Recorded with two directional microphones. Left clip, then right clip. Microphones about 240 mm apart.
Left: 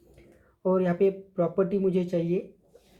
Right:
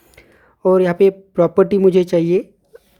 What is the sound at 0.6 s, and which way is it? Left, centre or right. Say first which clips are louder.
Speech: right 11 dB; right.